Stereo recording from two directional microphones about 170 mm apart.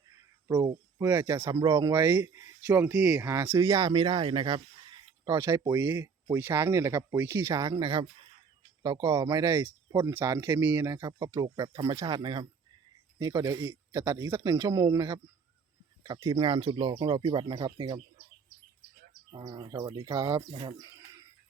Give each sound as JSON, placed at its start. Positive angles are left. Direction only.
{"t": 0.4, "sound": "speech", "side_deg": -15}
{"t": 3.2, "sound": "speech", "side_deg": -15}
{"t": 5.2, "sound": "speech", "side_deg": -15}
{"t": 10.9, "sound": "speech", "side_deg": -25}
{"t": 19.3, "sound": "speech", "side_deg": -25}